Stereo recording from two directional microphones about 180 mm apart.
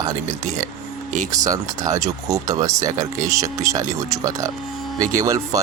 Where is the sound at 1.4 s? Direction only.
20° right (ahead or behind).